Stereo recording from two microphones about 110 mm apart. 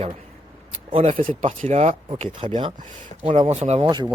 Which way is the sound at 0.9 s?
75° right (ahead or behind).